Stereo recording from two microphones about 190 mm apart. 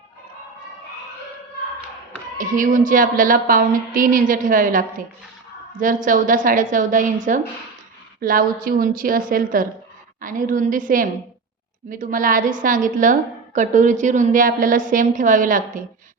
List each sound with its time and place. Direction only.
2.4 s a woman's voice: 45° right (ahead or behind)